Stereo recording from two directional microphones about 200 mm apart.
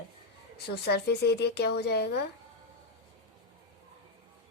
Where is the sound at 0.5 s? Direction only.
55° left (ahead or behind).